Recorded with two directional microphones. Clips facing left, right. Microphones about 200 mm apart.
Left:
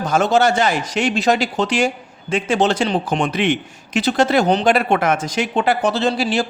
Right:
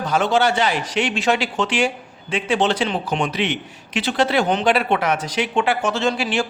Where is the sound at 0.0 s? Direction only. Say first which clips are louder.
Left 3 dB; 45° left (ahead or behind).